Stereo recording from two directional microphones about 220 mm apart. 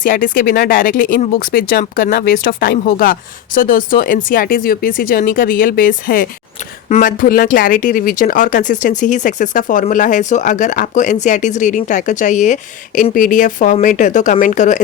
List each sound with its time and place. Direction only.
0.0 s speech: 40° left (ahead or behind)